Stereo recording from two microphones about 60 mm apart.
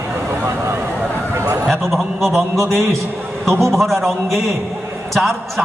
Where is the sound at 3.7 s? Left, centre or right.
Centre.